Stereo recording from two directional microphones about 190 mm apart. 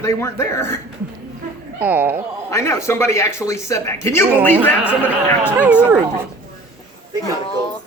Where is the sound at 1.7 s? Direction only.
10° right (ahead or behind).